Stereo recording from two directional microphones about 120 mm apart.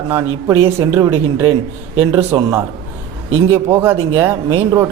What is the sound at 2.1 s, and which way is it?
Speech, 25° right (ahead or behind).